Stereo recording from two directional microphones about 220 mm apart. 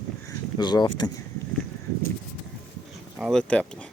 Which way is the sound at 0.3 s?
20° left (ahead or behind).